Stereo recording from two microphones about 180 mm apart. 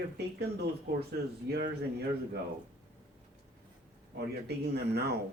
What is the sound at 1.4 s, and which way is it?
Speech, 65° right (ahead or behind).